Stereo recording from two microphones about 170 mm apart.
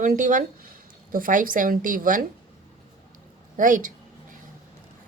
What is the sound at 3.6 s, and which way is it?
Speech, 50° right (ahead or behind).